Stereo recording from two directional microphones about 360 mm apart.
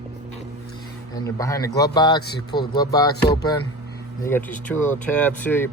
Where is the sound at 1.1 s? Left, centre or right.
Centre.